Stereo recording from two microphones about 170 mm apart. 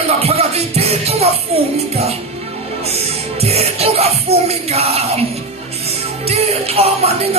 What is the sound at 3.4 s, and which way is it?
Music, 35° right (ahead or behind).